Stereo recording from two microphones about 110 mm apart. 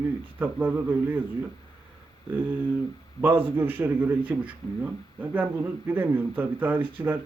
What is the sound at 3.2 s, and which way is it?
A man's voice, 20° right (ahead or behind).